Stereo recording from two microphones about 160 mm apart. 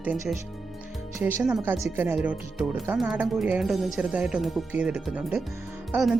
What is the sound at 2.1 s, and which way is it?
Speech, 5° right (ahead or behind).